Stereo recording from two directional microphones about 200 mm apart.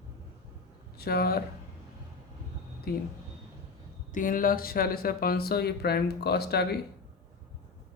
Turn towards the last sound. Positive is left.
turn(degrees=55)  # may be behind; listen again after turning